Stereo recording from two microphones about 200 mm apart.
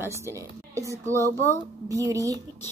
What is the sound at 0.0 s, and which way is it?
A woman's voice, 15° right (ahead or behind).